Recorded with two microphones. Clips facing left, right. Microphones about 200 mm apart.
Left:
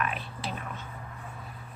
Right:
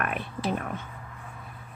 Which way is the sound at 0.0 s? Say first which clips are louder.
Right 4 dB; 55° right (ahead or behind).